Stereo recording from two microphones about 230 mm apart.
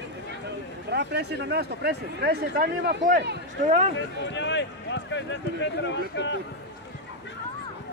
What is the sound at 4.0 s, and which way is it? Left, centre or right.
Speech, left.